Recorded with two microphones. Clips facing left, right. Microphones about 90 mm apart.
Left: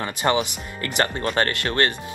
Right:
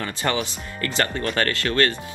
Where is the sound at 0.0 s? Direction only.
20° left (ahead or behind).